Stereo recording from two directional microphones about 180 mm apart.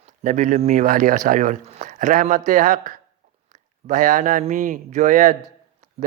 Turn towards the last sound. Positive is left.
turn(degrees=-45)  # may be behind; listen again after turning